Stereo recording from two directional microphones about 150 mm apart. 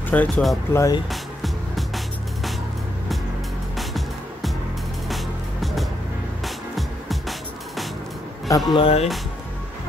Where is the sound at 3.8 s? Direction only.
Centre (ahead or behind).